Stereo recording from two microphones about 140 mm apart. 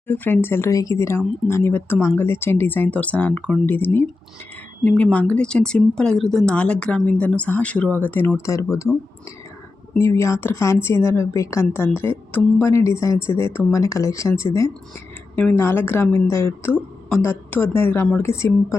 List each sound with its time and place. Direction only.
0.1 s a woman's voice: 15° left (ahead or behind)
10.0 s a woman's voice: 20° left (ahead or behind)